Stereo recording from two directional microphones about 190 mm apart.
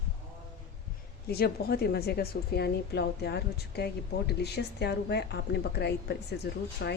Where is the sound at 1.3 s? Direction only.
55° left (ahead or behind).